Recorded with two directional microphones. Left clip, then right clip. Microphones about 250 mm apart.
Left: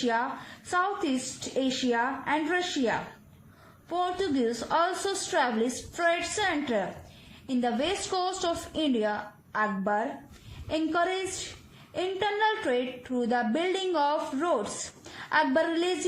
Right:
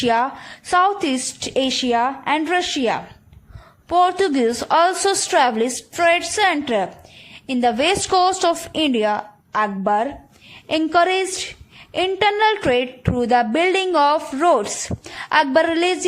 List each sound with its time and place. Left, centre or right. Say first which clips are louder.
0.0 s a woman's voice: right 10 dB; right